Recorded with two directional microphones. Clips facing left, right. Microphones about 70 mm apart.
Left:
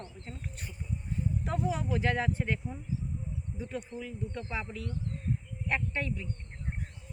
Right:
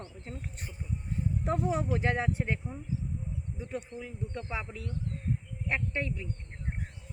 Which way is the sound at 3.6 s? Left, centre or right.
Right.